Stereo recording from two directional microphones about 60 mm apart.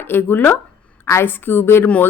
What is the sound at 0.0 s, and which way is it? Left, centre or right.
Speech, left.